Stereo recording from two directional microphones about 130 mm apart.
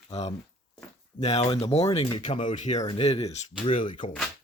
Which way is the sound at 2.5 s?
65° left (ahead or behind).